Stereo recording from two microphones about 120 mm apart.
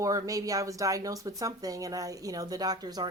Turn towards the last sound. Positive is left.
turn(degrees=-35)  # may be behind; listen again after turning